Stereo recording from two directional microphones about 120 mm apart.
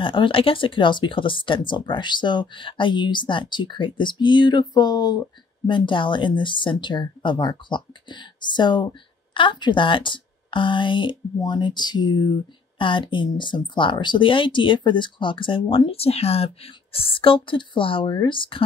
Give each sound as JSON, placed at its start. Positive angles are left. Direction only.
{"t": 0.0, "sound": "speech", "side_deg": 45}